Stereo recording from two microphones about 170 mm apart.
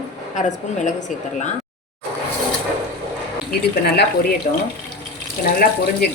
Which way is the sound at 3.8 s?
65° left (ahead or behind).